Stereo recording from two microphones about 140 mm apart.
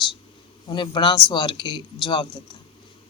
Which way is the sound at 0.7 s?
35° left (ahead or behind).